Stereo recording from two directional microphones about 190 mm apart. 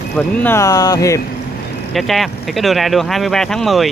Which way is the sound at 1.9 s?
Centre (ahead or behind).